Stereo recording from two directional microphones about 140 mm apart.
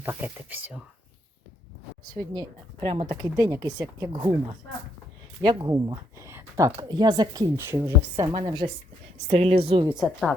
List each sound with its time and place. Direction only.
0.0 s speech: 15° right (ahead or behind)
2.0 s speech: 30° right (ahead or behind)
2.8 s speech: 40° right (ahead or behind)
5.4 s speech: 30° right (ahead or behind)
6.8 s speech: 30° right (ahead or behind)
8.3 s speech: 35° right (ahead or behind)
9.2 s a woman's voice: 45° right (ahead or behind)
9.9 s a woman's voice: centre (ahead or behind)